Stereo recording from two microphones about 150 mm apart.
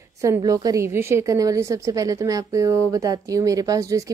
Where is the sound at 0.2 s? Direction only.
20° right (ahead or behind).